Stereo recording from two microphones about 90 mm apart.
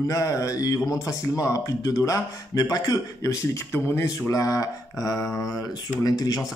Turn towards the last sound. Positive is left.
turn(degrees=45)  # may be behind; listen again after turning